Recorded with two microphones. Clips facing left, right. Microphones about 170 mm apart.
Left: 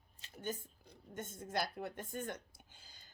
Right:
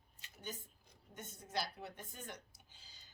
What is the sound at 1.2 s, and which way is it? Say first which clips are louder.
A woman's voice: left 4 dB; 50° left (ahead or behind).